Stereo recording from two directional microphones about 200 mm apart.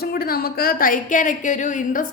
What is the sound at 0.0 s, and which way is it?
Speech, 50° left (ahead or behind).